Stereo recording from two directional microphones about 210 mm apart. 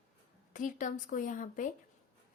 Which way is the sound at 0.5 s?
40° left (ahead or behind).